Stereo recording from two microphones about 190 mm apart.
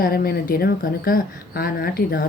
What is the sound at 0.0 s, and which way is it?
A woman's voice, 55° left (ahead or behind).